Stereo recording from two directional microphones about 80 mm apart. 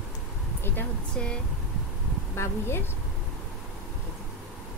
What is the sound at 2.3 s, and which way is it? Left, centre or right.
Speech, left.